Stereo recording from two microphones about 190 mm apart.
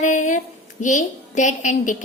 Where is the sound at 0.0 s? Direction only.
40° left (ahead or behind).